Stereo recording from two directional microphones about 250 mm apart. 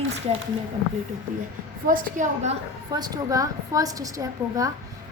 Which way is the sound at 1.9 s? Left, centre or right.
Right.